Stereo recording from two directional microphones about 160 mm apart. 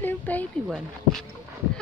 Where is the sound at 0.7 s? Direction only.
5° left (ahead or behind).